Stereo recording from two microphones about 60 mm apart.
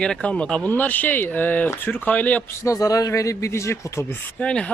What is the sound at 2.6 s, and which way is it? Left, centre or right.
Speech, left.